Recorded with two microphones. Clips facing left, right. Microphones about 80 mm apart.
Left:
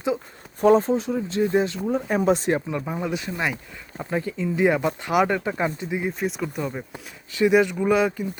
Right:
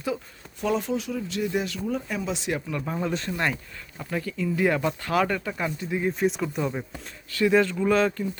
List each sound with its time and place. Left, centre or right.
0.6 s speech: left
2.0 s speech: left
2.6 s speech: left
2.8 s speech: centre
3.9 s speech: left
6.0 s speech: centre
7.3 s speech: centre